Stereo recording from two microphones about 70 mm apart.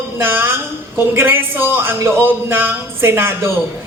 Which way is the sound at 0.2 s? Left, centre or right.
Right.